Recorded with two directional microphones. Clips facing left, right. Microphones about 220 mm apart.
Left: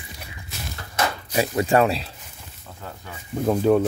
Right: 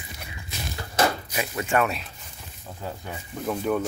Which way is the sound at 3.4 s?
30° left (ahead or behind).